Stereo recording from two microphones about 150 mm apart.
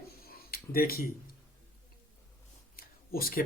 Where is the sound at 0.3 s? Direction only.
80° left.